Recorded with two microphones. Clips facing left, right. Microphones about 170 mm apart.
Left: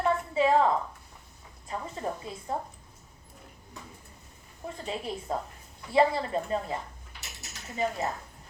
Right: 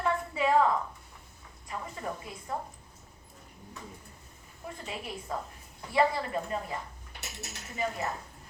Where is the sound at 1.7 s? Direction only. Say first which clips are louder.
Left 3 dB; 25° left (ahead or behind).